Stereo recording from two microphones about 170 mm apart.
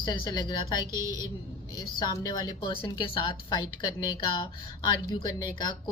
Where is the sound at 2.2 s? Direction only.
25° left (ahead or behind).